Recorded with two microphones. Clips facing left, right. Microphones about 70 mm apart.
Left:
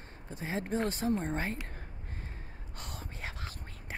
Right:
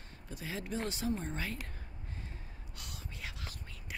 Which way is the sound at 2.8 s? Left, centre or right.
Left.